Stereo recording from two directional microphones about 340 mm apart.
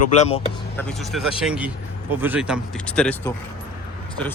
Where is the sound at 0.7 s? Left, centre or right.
Centre.